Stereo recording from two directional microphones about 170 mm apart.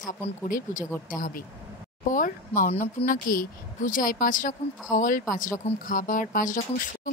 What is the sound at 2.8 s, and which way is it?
Speech, 55° left (ahead or behind).